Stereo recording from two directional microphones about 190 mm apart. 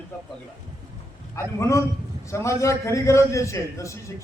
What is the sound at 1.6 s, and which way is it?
A man's voice, 15° left (ahead or behind).